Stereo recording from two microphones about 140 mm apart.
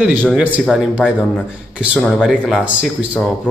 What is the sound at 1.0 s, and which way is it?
Speech, 5° left (ahead or behind).